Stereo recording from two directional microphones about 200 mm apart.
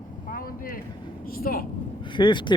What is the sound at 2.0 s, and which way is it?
Speech, 25° left (ahead or behind).